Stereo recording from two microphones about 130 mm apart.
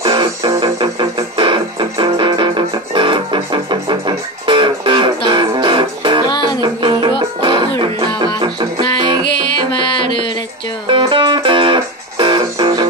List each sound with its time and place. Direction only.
0.0 s music: 30° right (ahead or behind)
6.2 s music: 35° left (ahead or behind)
6.6 s music: 35° right (ahead or behind)
9.7 s music: 40° left (ahead or behind)
10.9 s music: 40° right (ahead or behind)